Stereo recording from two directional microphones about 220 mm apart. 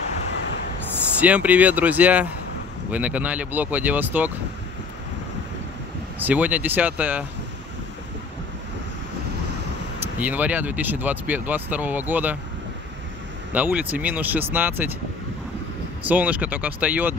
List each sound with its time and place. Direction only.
1.2 s speech: 5° right (ahead or behind)
6.1 s speech: 5° right (ahead or behind)
10.1 s speech: 5° right (ahead or behind)
13.5 s speech: 5° right (ahead or behind)
16.0 s speech: 5° right (ahead or behind)